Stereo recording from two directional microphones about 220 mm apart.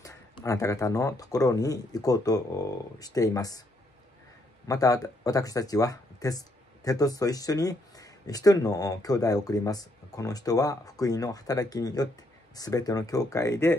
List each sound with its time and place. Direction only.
0.0 s speech: 15° left (ahead or behind)
4.6 s speech: 15° left (ahead or behind)